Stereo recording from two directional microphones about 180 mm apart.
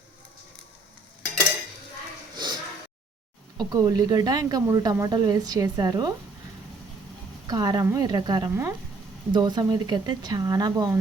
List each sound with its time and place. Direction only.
2.3 s a sound: 25° right (ahead or behind)
3.7 s speech: 20° right (ahead or behind)
7.4 s speech: 20° right (ahead or behind)